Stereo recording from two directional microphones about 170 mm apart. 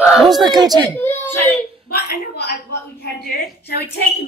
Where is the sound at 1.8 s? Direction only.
65° left (ahead or behind).